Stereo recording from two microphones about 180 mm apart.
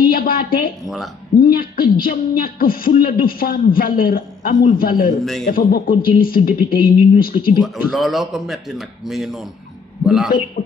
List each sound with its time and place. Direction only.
0.1 s a woman's voice: 55° left (ahead or behind)
0.8 s a man's voice: centre (ahead or behind)
1.4 s a man's voice: 55° left (ahead or behind)
7.6 s a man's voice: centre (ahead or behind)